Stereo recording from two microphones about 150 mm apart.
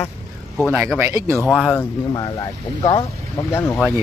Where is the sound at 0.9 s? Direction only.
15° right (ahead or behind).